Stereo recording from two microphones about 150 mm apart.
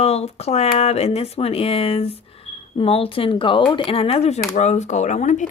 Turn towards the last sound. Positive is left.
turn(degrees=55)  # may be behind; listen again after turning